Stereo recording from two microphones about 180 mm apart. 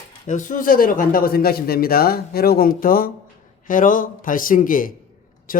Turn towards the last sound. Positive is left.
turn(degrees=50)  # may be behind; listen again after turning